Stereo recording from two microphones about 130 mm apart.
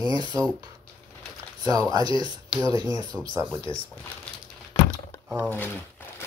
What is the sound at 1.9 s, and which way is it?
Speech, 35° right (ahead or behind).